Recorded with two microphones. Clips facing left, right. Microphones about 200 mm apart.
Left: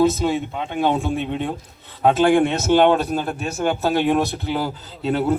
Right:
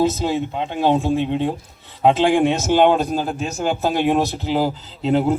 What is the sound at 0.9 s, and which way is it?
Speech, 20° right (ahead or behind).